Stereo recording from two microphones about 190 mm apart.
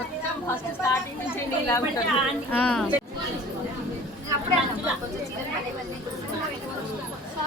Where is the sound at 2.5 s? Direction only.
10° left (ahead or behind).